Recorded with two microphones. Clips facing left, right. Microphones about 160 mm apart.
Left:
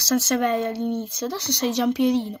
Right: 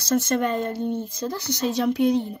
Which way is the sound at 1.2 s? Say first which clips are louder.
Left 1 dB; 75° left (ahead or behind).